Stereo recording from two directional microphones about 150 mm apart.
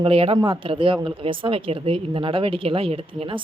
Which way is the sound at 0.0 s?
40° right (ahead or behind).